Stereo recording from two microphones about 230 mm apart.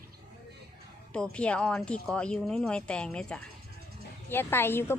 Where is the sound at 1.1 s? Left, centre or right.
Centre.